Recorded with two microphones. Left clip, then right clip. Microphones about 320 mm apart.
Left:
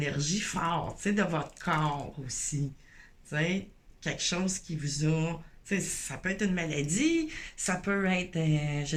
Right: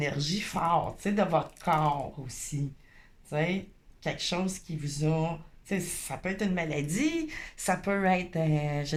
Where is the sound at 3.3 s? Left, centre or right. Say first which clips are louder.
Right 1 dB; centre.